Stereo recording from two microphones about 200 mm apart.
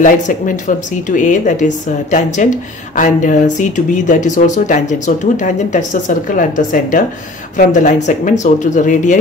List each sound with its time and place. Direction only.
0.0 s speech: 40° left (ahead or behind)